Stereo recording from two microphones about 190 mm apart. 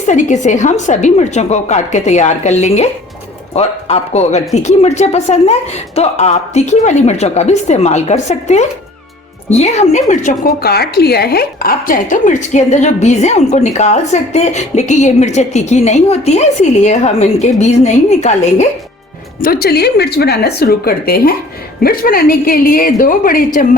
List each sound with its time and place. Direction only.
0.0 s a woman's voice: 40° left (ahead or behind)
19.4 s a woman's voice: 55° left (ahead or behind)